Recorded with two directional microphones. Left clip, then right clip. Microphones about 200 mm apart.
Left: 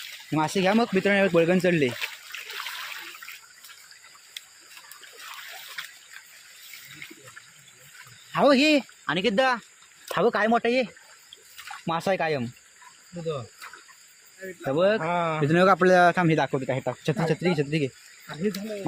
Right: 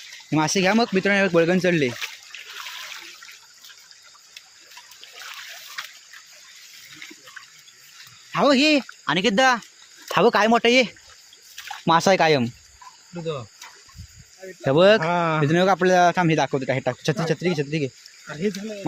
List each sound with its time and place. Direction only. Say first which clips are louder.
0.3 s speech: right 3 dB; 30° right (ahead or behind)
2.3 s trickle: left 1 dB; 20° left (ahead or behind)
5.8 s water: right 4 dB; 15° right (ahead or behind)
8.3 s speech: right 2 dB; 25° right (ahead or behind)
14.6 s speech: right 7 dB; 45° right (ahead or behind)
15.4 s speech: left 2 dB; 5° right (ahead or behind); by 17.2 s 30° right (ahead or behind)
17.2 s speech: left 2 dB; 10° right (ahead or behind)